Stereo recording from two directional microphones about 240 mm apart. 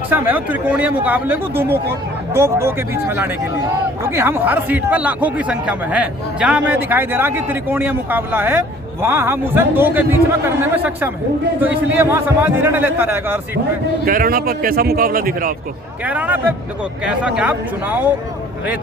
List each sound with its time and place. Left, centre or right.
0.1 s a man's voice: centre
14.0 s a man's voice: right
16.0 s a man's voice: centre